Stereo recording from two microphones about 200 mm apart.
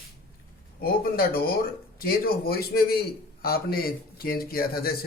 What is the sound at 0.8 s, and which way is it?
Speech, 50° left (ahead or behind).